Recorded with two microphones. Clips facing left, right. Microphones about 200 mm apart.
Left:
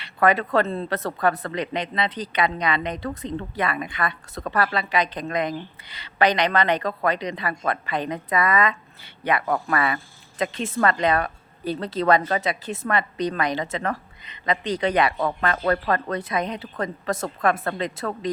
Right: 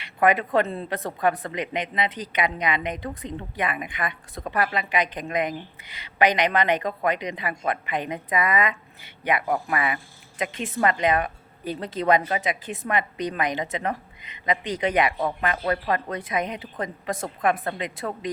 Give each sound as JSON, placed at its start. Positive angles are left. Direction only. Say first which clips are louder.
{"t": 0.0, "sound": "a woman's voice", "louder": "left 1 dB", "side_deg": -15}